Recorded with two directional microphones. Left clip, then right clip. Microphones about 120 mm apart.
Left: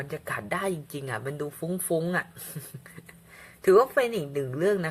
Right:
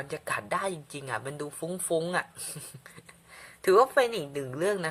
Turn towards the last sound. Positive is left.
turn(degrees=-20)  # may be behind; listen again after turning